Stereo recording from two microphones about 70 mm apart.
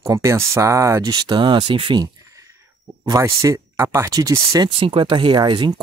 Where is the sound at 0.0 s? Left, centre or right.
Right.